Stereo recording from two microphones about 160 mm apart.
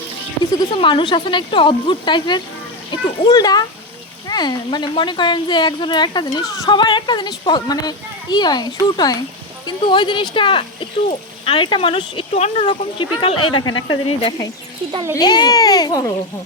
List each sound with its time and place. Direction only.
0.5 s a child's voice: 30° left (ahead or behind)